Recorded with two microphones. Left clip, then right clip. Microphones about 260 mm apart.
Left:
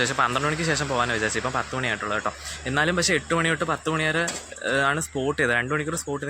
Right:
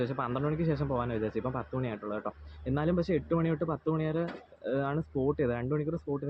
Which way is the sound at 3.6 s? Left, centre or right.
Centre.